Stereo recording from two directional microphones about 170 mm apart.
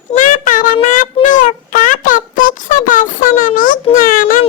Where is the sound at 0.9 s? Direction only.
50° left (ahead or behind).